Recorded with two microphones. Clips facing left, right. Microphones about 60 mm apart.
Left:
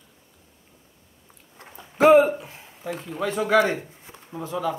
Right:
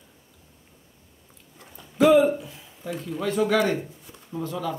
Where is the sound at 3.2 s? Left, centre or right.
Left.